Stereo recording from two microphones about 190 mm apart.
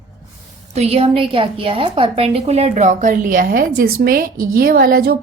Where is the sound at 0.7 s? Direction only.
35° right (ahead or behind).